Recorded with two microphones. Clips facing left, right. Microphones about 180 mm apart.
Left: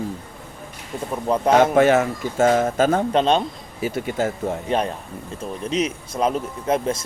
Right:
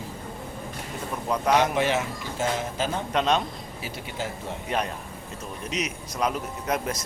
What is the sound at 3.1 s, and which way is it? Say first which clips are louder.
Speech: left 3 dB; 30° left (ahead or behind).